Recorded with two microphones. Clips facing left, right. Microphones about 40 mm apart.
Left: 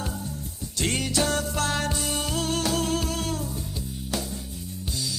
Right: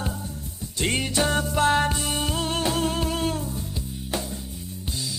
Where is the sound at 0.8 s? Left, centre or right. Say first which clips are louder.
Right 2 dB; right.